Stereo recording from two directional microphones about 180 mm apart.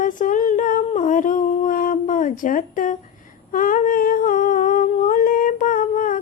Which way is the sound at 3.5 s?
50° left (ahead or behind).